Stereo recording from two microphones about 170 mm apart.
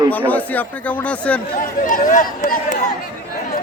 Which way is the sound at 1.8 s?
50° left (ahead or behind).